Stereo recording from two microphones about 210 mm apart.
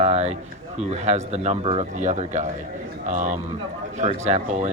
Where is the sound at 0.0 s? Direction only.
30° right (ahead or behind).